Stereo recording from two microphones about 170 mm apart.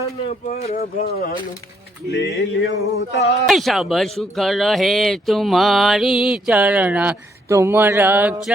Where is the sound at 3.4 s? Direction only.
Centre (ahead or behind).